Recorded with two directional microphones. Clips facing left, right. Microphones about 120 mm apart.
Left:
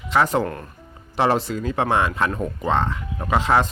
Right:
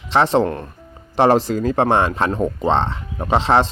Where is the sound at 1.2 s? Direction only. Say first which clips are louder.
Right 6 dB; 40° right (ahead or behind).